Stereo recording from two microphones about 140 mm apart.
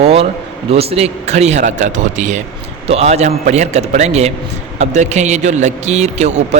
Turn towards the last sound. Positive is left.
turn(degrees=-55)  # may be behind; listen again after turning